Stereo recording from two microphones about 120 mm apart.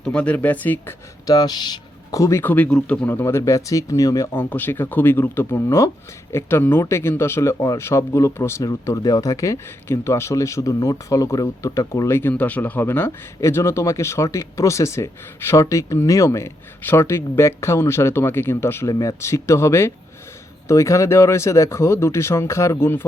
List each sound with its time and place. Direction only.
0.0 s speech: 10° left (ahead or behind)
1.3 s speech: 35° left (ahead or behind); by 23.0 s 20° left (ahead or behind)